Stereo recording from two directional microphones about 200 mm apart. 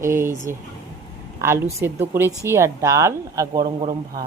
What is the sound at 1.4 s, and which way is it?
A woman's voice, 15° right (ahead or behind).